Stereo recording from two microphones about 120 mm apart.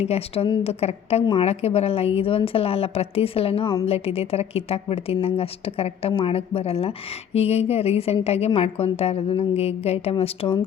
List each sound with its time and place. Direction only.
0.0 s a woman's voice: 55° left (ahead or behind)